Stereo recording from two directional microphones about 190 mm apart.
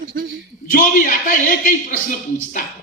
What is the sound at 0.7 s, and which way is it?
Speech, 45° left (ahead or behind).